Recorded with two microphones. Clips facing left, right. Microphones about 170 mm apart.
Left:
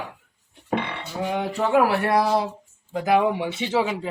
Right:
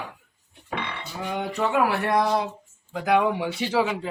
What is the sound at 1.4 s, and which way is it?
Speech, 30° left (ahead or behind).